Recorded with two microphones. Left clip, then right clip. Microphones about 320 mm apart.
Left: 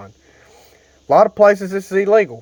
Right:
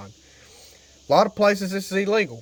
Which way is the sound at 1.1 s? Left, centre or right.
Centre.